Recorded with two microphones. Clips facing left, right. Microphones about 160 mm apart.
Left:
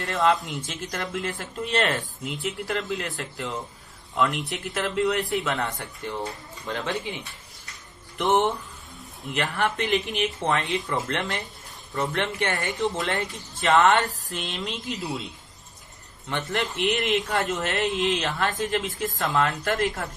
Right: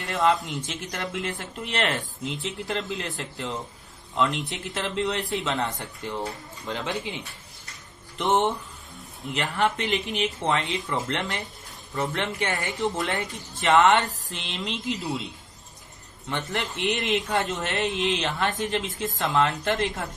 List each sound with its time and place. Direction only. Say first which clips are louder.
0.0 s a man's voice: even; 20° right (ahead or behind)
8.2 s a man's voice: left 1 dB; 20° right (ahead or behind)
16.3 s a man's voice: left 2 dB; 15° right (ahead or behind)